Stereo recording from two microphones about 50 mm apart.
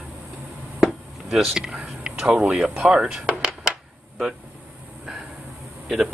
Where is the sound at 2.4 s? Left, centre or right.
Centre.